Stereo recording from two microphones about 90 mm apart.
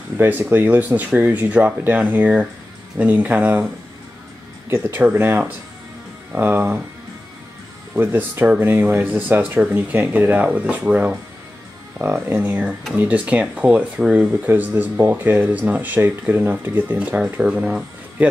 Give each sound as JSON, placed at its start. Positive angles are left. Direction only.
{"t": 0.2, "sound": "speech", "side_deg": -25}
{"t": 4.6, "sound": "speech", "side_deg": -25}
{"t": 7.9, "sound": "speech", "side_deg": -20}